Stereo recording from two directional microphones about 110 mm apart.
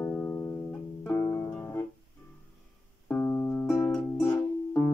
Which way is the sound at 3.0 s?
15° left (ahead or behind).